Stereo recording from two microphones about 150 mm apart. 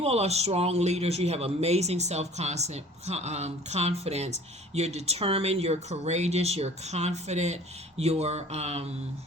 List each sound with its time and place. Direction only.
0.0 s speech: 45° right (ahead or behind)